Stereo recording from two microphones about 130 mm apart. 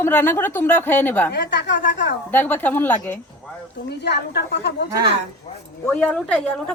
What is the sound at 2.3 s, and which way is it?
Speech, 15° left (ahead or behind).